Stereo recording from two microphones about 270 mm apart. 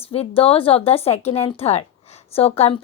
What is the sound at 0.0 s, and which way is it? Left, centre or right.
Speech, left.